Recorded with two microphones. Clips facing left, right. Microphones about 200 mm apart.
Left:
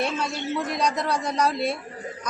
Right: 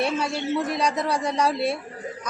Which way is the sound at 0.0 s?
10° right (ahead or behind).